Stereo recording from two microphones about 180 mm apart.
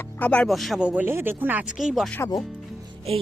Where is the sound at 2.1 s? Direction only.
15° left (ahead or behind).